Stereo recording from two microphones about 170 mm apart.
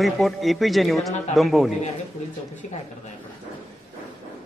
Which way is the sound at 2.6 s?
45° left (ahead or behind).